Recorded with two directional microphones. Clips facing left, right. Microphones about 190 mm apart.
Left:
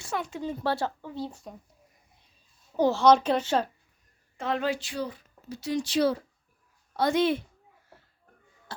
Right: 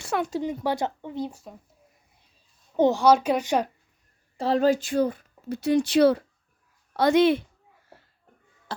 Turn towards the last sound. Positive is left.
turn(degrees=-75)  # may be behind; listen again after turning